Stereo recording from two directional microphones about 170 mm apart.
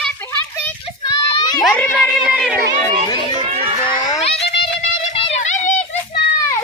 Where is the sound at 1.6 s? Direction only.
10° left (ahead or behind).